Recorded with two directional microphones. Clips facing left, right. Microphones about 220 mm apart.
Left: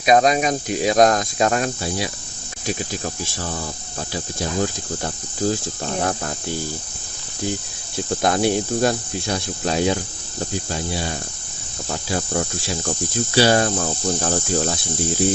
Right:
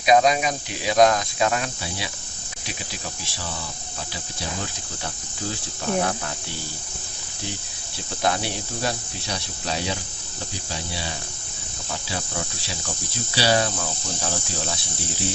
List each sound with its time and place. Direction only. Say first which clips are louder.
0.0 s speech: left 2 dB; 45° left (ahead or behind)
5.0 s speech: left 9 dB; 45° left (ahead or behind)
8.2 s speech: left 6 dB; 50° left (ahead or behind)